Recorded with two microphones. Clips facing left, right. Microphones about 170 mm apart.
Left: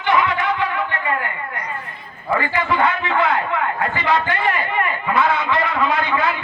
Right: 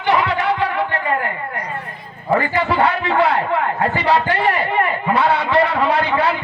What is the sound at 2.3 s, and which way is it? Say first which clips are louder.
A man's voice: right 3 dB; 35° right (ahead or behind).